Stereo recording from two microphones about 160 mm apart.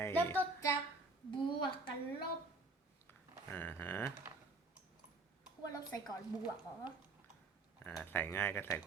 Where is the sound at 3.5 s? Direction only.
10° left (ahead or behind).